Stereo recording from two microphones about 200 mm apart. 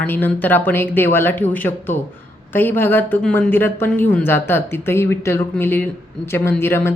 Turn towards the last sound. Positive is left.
turn(degrees=10)  # may be behind; listen again after turning